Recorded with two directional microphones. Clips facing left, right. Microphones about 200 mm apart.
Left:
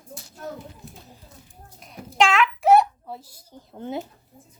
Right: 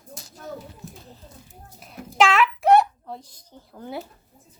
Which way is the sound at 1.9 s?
Centre (ahead or behind).